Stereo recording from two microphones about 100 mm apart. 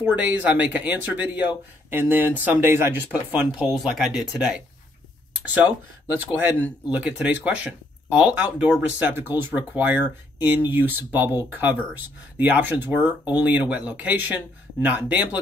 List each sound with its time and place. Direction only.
0.0 s speech: 15° right (ahead or behind)
3.7 s speech: 5° right (ahead or behind)